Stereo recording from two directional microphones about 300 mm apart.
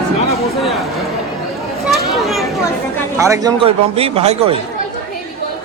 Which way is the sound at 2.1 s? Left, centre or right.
Centre.